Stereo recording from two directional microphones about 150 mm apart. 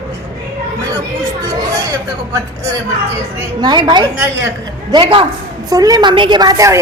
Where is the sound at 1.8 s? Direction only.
20° right (ahead or behind).